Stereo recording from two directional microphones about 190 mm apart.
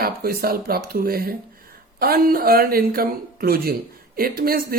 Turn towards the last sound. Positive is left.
turn(degrees=-50)  # may be behind; listen again after turning